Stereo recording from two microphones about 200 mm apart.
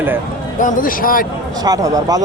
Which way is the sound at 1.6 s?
20° right (ahead or behind).